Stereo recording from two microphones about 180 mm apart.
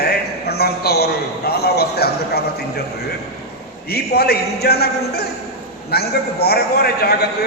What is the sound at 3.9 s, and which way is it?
A man's voice, 60° left (ahead or behind).